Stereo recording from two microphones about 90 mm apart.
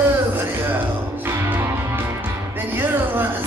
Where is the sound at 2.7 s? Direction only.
25° right (ahead or behind).